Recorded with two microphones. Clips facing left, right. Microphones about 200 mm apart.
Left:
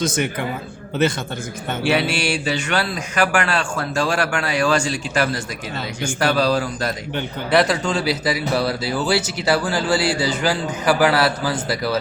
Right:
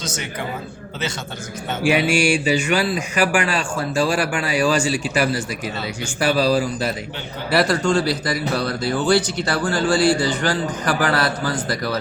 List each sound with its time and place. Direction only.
0.0 s a man's voice: 55° left (ahead or behind)
1.8 s speech: 10° right (ahead or behind)